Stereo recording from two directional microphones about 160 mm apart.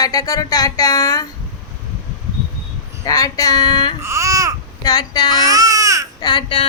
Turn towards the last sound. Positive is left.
turn(degrees=30)  # may be behind; listen again after turning